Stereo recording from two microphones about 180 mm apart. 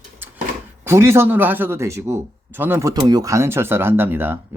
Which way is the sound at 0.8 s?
15° right (ahead or behind).